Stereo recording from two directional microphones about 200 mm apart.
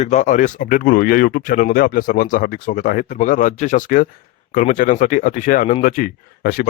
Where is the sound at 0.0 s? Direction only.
35° left (ahead or behind).